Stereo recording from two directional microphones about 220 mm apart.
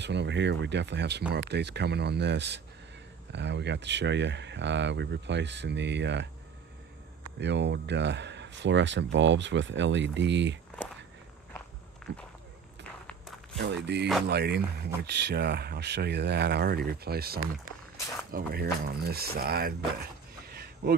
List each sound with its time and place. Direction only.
0.0 s speech: 50° right (ahead or behind)
7.3 s speech: 55° right (ahead or behind)
12.1 s speech: 50° right (ahead or behind)
13.9 s speech: 50° right (ahead or behind)
20.4 s a sound: 45° right (ahead or behind)